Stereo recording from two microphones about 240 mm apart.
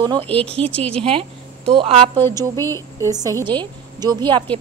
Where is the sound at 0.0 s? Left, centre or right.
Right.